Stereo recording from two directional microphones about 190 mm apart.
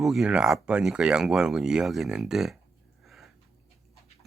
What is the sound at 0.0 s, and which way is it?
Speech, centre (ahead or behind).